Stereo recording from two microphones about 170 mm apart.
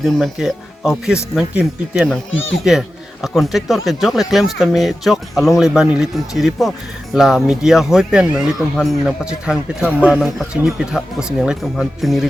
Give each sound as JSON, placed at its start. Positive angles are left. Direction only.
{"t": 0.0, "sound": "speech", "side_deg": 0}